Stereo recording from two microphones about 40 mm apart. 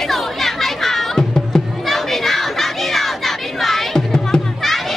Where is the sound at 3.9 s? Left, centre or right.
Centre.